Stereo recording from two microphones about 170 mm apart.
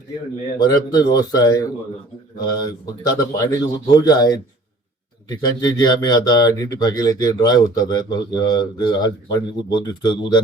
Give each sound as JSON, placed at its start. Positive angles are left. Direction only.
{"t": 0.6, "sound": "speech", "side_deg": 25}